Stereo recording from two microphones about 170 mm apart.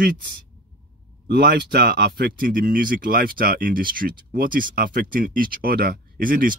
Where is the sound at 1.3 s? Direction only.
70° right (ahead or behind).